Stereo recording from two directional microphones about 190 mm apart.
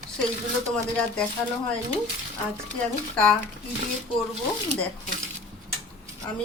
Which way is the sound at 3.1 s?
5° left (ahead or behind).